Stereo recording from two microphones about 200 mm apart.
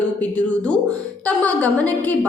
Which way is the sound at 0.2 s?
5° left (ahead or behind).